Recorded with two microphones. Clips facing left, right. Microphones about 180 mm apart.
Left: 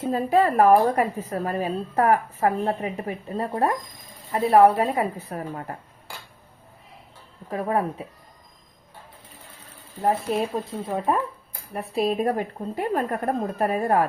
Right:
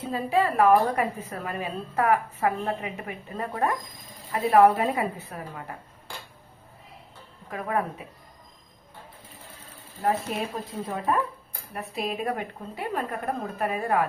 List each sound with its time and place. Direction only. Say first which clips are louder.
0.0 s a woman's voice: left 4 dB; 45° left (ahead or behind)
7.5 s a woman's voice: left 4 dB; 30° left (ahead or behind)
10.7 s a woman's voice: left 3 dB; 25° left (ahead or behind); by 14.1 s 40° left (ahead or behind)